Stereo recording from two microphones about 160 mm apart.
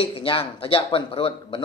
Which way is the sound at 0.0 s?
35° left (ahead or behind).